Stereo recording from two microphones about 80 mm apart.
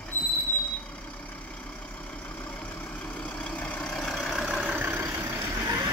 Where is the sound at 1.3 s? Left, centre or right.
Centre.